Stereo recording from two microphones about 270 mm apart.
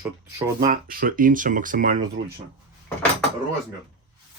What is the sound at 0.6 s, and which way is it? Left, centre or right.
Speech, right.